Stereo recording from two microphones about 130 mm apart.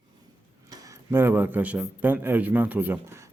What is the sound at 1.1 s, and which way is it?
A man's voice, 15° right (ahead or behind).